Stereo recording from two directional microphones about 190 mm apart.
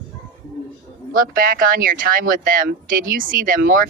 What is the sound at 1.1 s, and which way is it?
Speech, 50° right (ahead or behind).